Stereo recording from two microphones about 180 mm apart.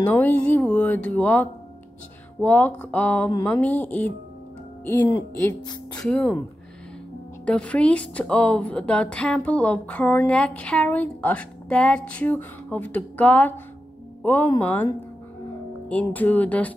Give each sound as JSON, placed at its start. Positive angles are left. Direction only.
{"t": 0.0, "sound": "a woman's voice", "side_deg": 10}
{"t": 5.9, "sound": "speech", "side_deg": 5}
{"t": 7.4, "sound": "a woman's voice", "side_deg": 5}